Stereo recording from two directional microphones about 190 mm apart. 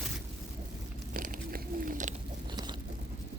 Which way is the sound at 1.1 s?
50° right (ahead or behind).